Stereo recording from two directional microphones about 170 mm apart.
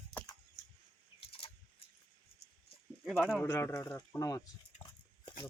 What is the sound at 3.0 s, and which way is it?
Speech, centre (ahead or behind).